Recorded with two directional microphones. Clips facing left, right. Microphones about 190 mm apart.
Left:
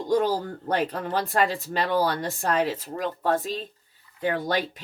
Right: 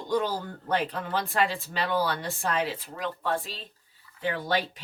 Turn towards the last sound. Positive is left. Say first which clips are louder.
# left 3 dB
turn(degrees=40)  # may be behind; listen again after turning